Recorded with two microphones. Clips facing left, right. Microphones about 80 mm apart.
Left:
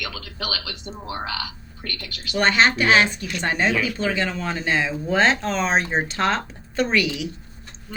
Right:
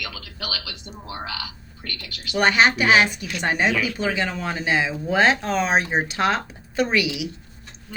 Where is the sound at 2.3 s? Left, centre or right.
Centre.